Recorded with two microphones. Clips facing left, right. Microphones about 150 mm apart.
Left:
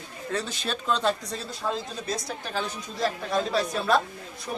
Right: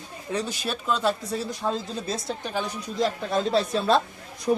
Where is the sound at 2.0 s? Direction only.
25° right (ahead or behind).